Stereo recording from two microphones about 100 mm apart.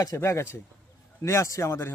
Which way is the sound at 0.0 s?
30° left (ahead or behind).